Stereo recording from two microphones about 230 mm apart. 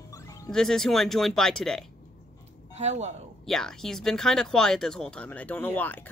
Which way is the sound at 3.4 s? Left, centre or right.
Centre.